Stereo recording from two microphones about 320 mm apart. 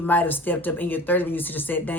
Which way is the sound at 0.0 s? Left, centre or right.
Centre.